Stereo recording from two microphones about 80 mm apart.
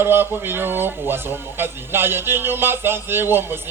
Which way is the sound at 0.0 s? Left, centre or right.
Right.